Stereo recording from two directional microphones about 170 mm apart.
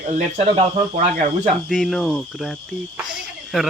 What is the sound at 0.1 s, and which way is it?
Speech, 40° right (ahead or behind).